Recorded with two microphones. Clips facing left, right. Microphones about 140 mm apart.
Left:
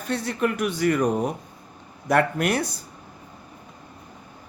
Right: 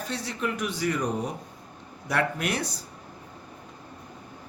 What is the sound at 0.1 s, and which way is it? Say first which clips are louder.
Speech: left 8 dB; 55° left (ahead or behind).